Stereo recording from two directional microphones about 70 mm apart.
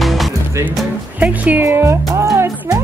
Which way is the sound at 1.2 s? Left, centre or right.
Right.